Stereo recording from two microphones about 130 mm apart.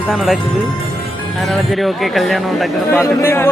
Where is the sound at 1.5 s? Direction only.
Centre (ahead or behind).